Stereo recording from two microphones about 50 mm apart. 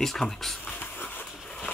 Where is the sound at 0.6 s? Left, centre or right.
Left.